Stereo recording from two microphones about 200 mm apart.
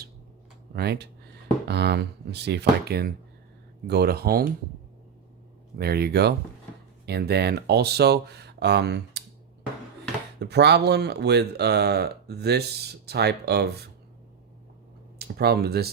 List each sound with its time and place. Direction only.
0.7 s speech: 50° right (ahead or behind)
5.7 s speech: 50° right (ahead or behind)
10.4 s speech: 55° right (ahead or behind)
15.2 s speech: 50° right (ahead or behind)